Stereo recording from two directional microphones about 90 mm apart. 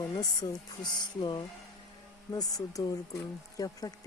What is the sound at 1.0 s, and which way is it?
Speech, 50° left (ahead or behind).